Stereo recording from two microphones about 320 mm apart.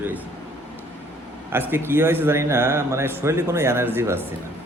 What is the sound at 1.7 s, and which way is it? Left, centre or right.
A man's voice, centre.